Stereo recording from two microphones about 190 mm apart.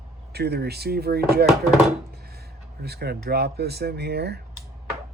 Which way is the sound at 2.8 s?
55° right (ahead or behind).